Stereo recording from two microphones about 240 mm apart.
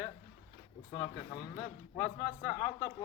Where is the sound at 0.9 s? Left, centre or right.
Centre.